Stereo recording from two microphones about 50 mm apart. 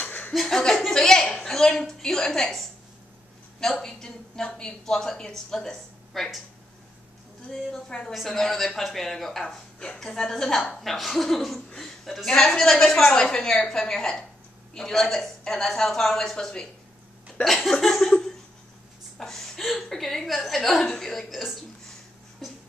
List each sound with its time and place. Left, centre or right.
0.0 s chuckle: left
0.3 s speech: centre
0.6 s a woman's voice: centre
7.7 s a woman's voice: centre
8.1 s a woman's voice: centre
19.1 s gasp: centre
19.6 s a woman's voice: centre
21.3 s speech: centre